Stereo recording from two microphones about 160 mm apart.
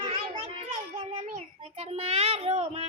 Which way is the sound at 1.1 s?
45° right (ahead or behind).